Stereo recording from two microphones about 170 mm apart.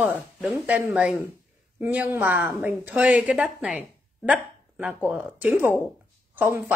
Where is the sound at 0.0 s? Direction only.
10° right (ahead or behind).